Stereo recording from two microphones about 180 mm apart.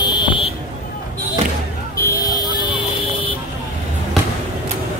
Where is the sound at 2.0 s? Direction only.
20° left (ahead or behind).